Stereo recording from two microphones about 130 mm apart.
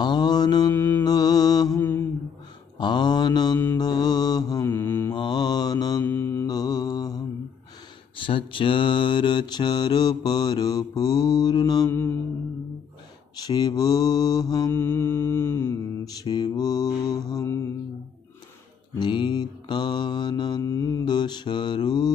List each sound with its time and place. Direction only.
0.0 s mantra: 35° left (ahead or behind)
0.7 s mantra: 15° left (ahead or behind)
1.0 s mantra: 30° left (ahead or behind)
2.8 s mantra: 35° left (ahead or behind)
4.6 s mantra: 15° left (ahead or behind)
5.1 s mantra: 35° left (ahead or behind)
6.0 s mantra: 20° left (ahead or behind)
6.5 s mantra: 30° left (ahead or behind)
8.2 s mantra: 40° left (ahead or behind)
11.9 s music: 15° left (ahead or behind)
13.4 s mantra: 35° left (ahead or behind)
14.7 s mantra: 15° left (ahead or behind)
18.9 s mantra: 35° left (ahead or behind)